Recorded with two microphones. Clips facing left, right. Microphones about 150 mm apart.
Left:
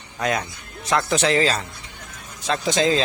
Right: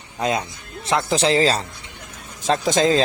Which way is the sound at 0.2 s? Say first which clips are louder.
Right 2 dB; 20° right (ahead or behind).